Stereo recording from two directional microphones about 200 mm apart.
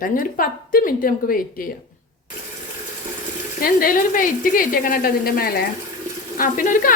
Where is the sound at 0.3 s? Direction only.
45° left (ahead or behind).